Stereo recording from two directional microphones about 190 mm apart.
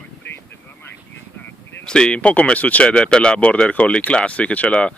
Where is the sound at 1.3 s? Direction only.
5° left (ahead or behind).